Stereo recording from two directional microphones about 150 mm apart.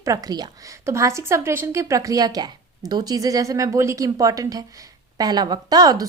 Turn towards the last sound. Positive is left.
turn(degrees=-25)  # may be behind; listen again after turning